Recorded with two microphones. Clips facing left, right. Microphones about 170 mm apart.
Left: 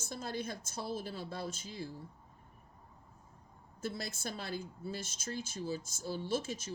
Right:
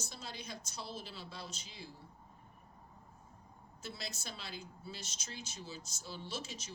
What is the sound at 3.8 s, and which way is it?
A woman's voice, 50° left (ahead or behind).